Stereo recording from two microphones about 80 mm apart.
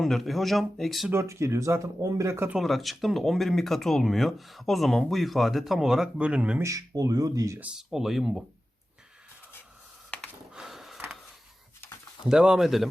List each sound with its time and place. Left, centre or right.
0.0 s speech: centre
1.1 s speech: right
2.6 s speech: centre
6.6 s speech: right
7.6 s speech: centre
10.1 s a sound: centre
10.5 s a sound: centre
12.2 s speech: centre